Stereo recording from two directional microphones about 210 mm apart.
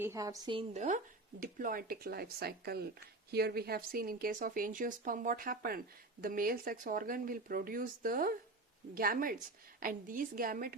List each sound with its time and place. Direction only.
0.0 s a woman's voice: 15° right (ahead or behind)
0.7 s a woman's voice: 35° right (ahead or behind)